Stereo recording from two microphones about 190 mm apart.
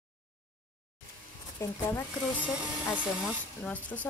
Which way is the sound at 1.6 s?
15° left (ahead or behind).